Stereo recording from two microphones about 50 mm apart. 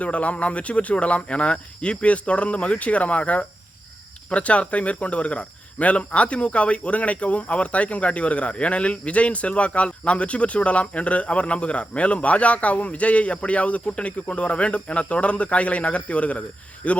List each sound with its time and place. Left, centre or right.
0.0 s speech: left